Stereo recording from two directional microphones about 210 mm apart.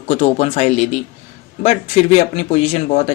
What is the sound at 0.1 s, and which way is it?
Speech, 30° left (ahead or behind).